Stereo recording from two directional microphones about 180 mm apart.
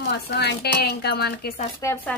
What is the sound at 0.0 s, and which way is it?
Speech, 65° left (ahead or behind).